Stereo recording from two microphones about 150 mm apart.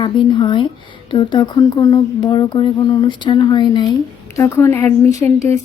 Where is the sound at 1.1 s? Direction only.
30° left (ahead or behind).